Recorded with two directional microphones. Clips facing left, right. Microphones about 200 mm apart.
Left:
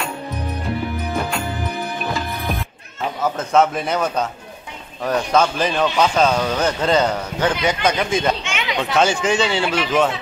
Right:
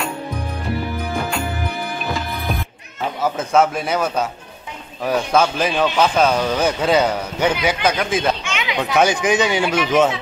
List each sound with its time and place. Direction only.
3.3 s a man's voice: 5° right (ahead or behind)
8.9 s speech: 15° right (ahead or behind)